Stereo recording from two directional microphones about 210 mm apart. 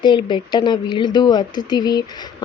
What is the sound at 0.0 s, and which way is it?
Speech, 20° left (ahead or behind).